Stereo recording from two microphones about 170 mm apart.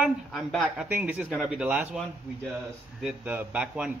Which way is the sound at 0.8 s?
10° right (ahead or behind).